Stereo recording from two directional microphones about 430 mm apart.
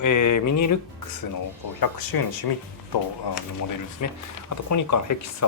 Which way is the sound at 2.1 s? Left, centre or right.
Left.